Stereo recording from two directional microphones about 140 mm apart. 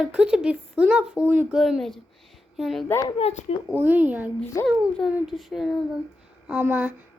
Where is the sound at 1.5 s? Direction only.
Centre (ahead or behind).